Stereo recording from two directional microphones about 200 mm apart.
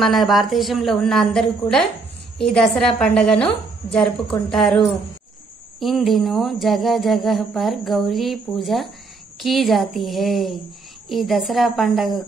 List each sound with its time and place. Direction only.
0.0 s speech: centre (ahead or behind)